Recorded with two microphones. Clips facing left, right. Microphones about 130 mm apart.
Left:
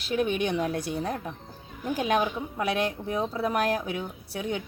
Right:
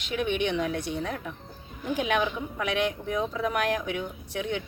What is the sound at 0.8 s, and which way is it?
Speech, 10° left (ahead or behind).